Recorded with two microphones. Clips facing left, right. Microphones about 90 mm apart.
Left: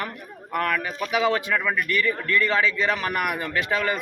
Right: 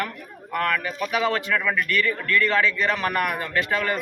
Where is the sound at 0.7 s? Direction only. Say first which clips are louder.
Even; 20° left (ahead or behind).